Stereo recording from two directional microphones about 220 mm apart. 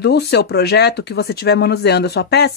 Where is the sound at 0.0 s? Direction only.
50° left (ahead or behind).